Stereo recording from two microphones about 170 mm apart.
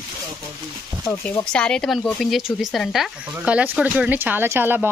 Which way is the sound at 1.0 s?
10° left (ahead or behind).